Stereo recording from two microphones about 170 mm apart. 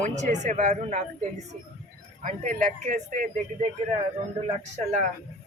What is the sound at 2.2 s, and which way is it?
Speech, 50° right (ahead or behind).